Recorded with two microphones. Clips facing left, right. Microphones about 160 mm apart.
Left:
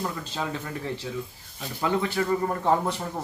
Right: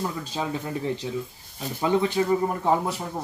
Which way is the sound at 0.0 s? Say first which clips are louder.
Right 2 dB; 10° right (ahead or behind).